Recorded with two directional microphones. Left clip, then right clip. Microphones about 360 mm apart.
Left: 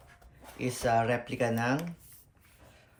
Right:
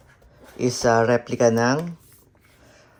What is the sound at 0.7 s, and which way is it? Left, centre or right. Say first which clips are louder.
Speech: right 9 dB; centre.